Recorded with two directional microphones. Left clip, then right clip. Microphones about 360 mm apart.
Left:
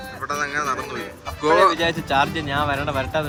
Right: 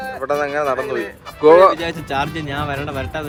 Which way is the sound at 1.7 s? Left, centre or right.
Centre.